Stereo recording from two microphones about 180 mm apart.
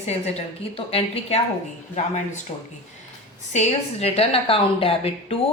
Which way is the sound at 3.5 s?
35° left (ahead or behind).